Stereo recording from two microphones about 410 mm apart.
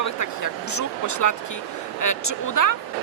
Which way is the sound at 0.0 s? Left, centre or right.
Left.